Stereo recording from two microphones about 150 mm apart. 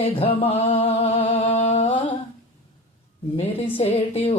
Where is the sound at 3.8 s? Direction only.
40° left (ahead or behind).